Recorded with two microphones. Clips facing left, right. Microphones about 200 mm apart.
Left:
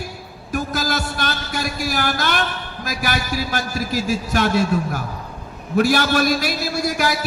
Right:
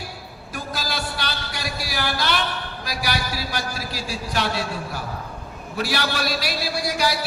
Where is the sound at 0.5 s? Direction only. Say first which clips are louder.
Left 7 dB; 45° left (ahead or behind).